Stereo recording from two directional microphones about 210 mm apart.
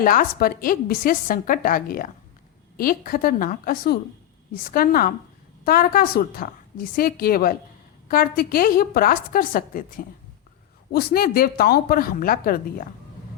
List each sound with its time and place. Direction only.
0.0 s a woman's voice: 40° left (ahead or behind)